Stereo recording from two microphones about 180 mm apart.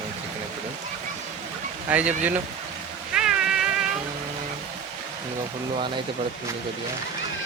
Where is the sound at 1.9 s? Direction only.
10° right (ahead or behind).